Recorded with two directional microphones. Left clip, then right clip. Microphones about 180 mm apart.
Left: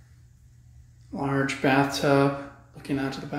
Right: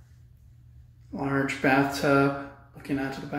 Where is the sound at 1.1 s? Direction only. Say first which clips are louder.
Left 1 dB; 15° left (ahead or behind).